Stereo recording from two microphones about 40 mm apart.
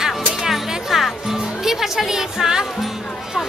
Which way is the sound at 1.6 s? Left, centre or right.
Centre.